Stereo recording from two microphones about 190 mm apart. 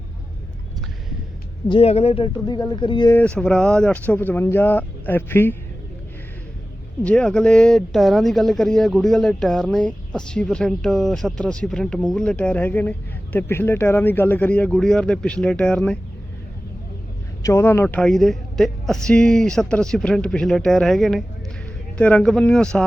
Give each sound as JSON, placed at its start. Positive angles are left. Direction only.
{"t": 1.6, "sound": "speech", "side_deg": 30}
{"t": 3.2, "sound": "speech", "side_deg": 5}
{"t": 7.0, "sound": "speech", "side_deg": 5}
{"t": 17.4, "sound": "speech", "side_deg": 15}